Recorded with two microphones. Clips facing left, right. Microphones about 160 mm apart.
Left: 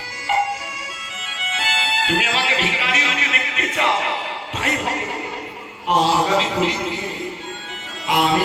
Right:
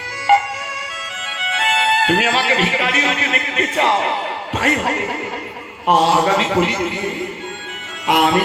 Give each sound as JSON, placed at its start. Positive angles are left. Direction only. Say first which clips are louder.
{"t": 1.5, "sound": "a man's voice", "louder": "right 7 dB", "side_deg": -60}
{"t": 8.0, "sound": "music", "louder": "right 3 dB", "side_deg": -60}